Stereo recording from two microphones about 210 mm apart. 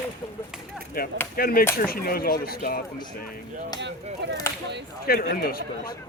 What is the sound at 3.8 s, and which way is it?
Speech, 60° right (ahead or behind).